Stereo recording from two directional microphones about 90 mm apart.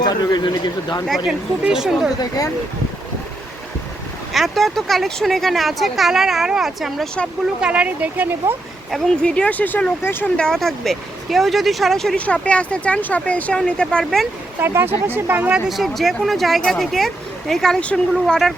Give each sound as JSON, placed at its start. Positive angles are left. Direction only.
{"t": 0.0, "sound": "speech", "side_deg": 50}
{"t": 1.0, "sound": "speech", "side_deg": 0}
{"t": 4.3, "sound": "speech", "side_deg": 0}
{"t": 9.2, "sound": "speech", "side_deg": 10}
{"t": 10.3, "sound": "speech", "side_deg": 5}
{"t": 12.1, "sound": "speech", "side_deg": 15}
{"t": 14.6, "sound": "speech", "side_deg": -25}